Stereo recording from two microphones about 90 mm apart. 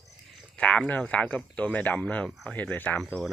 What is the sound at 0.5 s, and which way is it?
Speech, 10° left (ahead or behind).